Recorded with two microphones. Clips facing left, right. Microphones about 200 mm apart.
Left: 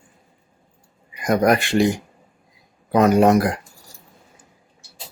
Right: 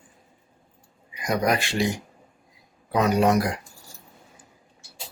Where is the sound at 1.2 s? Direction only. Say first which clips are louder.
Left 6 dB; 55° left (ahead or behind).